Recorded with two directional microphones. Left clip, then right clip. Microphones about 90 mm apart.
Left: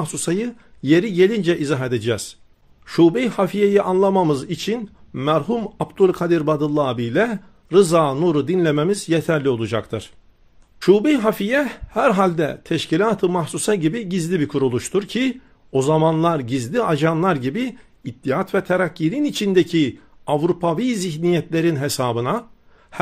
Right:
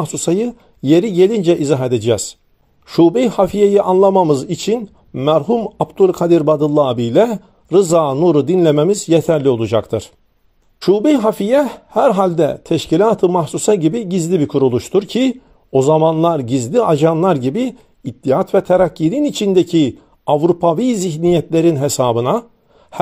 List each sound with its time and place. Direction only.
0.0 s a man's voice: 35° right (ahead or behind)
10.8 s a man's voice: 30° right (ahead or behind)
15.0 s a man's voice: 40° right (ahead or behind)
15.7 s a man's voice: 30° right (ahead or behind); by 22.3 s 45° right (ahead or behind)